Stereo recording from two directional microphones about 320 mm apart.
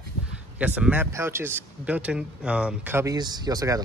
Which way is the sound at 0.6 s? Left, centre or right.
Centre.